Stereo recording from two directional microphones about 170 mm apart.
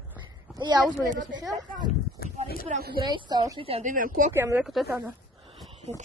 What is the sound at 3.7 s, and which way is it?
Speech, 50° right (ahead or behind).